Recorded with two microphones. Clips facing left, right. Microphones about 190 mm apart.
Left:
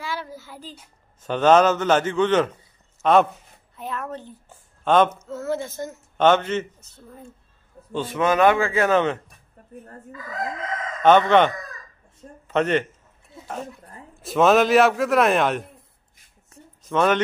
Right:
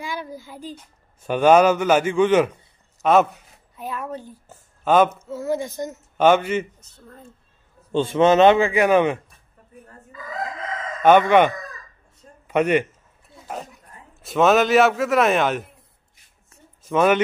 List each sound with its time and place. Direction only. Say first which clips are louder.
0.0 s a sound: right 1 dB; 15° right (ahead or behind)
1.2 s a man's voice: right 2 dB; 10° right (ahead or behind)
6.8 s speech: left 2 dB; 10° left (ahead or behind)
7.9 s a man's voice: right 6 dB; 25° right (ahead or behind)
11.0 s a man's voice: right 1 dB; 10° right (ahead or behind)
14.2 s a man's voice: even; centre (ahead or behind)
16.8 s speech: right 2 dB; 10° right (ahead or behind)